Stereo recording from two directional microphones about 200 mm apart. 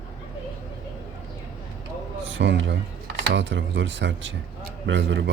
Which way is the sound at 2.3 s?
65° right (ahead or behind).